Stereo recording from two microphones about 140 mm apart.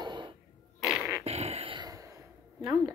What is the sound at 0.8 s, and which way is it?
Fart, 5° right (ahead or behind).